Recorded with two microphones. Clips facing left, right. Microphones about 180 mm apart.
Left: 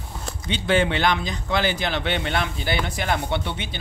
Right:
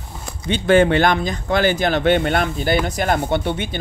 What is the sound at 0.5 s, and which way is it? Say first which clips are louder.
Speech: right 7 dB; 50° right (ahead or behind).